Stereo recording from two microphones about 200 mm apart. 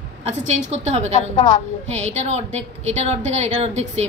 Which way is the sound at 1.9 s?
35° right (ahead or behind).